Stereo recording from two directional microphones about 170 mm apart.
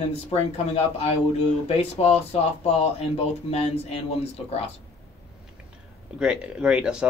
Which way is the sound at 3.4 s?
40° left (ahead or behind).